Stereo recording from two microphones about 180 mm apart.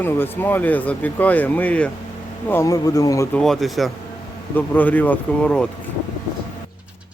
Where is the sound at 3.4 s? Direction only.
Centre (ahead or behind).